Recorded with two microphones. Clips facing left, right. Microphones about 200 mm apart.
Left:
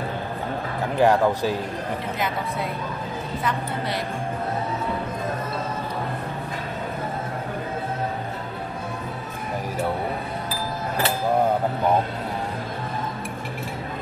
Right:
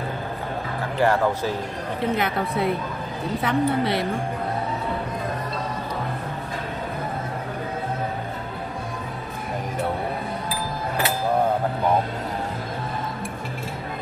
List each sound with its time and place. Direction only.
0.9 s speech: 15° left (ahead or behind)
2.1 s a woman's voice: 65° right (ahead or behind)